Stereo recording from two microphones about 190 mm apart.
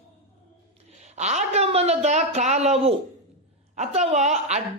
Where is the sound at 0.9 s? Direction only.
35° right (ahead or behind).